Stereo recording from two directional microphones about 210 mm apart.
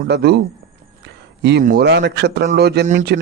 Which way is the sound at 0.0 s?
50° right (ahead or behind).